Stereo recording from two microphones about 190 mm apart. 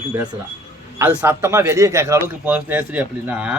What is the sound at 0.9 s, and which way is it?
A man's voice, 10° right (ahead or behind).